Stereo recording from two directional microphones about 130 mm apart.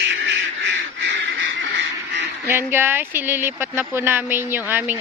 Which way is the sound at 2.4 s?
20° right (ahead or behind).